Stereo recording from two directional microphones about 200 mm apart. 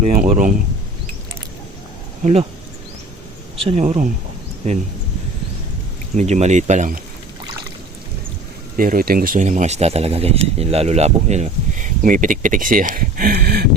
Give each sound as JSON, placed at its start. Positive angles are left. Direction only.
{"t": 0.0, "sound": "speech", "side_deg": -35}
{"t": 2.2, "sound": "speech", "side_deg": -30}
{"t": 3.6, "sound": "speech", "side_deg": -30}
{"t": 6.1, "sound": "speech", "side_deg": -35}
{"t": 8.8, "sound": "speech", "side_deg": -45}